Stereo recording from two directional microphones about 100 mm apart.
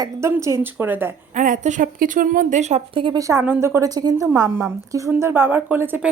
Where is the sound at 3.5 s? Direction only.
25° right (ahead or behind).